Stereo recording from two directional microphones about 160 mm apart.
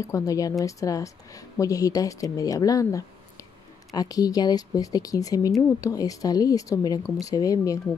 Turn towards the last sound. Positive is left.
turn(degrees=20)  # may be behind; listen again after turning